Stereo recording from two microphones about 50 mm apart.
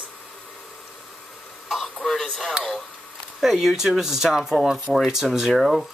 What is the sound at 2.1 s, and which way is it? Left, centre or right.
Speech, centre.